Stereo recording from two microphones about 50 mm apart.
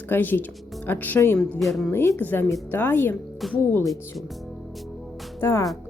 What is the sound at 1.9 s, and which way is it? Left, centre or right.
Speech, left.